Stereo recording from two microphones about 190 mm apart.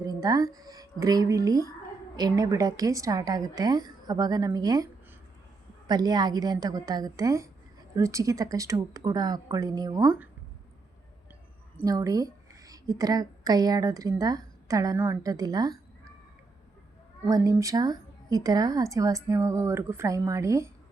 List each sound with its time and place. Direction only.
0.0 s a woman's voice: 20° right (ahead or behind)
5.9 s a woman's voice: 20° right (ahead or behind)
11.8 s a woman's voice: 20° right (ahead or behind)
17.2 s speech: 20° right (ahead or behind)